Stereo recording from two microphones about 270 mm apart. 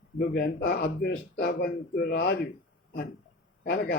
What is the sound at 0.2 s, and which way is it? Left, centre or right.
Speech, left.